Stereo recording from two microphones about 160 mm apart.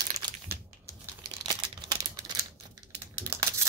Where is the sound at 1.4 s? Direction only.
25° right (ahead or behind).